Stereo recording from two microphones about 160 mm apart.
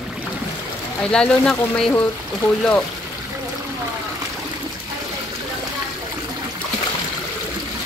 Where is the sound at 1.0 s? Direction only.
5° left (ahead or behind).